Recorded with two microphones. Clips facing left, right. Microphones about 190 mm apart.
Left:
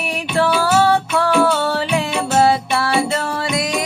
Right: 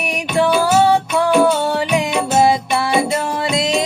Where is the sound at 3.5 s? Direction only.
25° right (ahead or behind).